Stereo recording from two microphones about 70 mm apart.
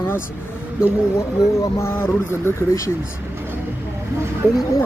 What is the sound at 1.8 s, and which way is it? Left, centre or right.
Speech, left.